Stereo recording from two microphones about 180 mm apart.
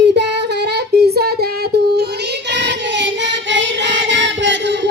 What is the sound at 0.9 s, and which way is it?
Child singing, 65° right (ahead or behind).